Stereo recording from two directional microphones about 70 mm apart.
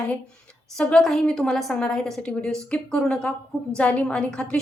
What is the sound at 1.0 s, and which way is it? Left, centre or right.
A woman's voice, centre.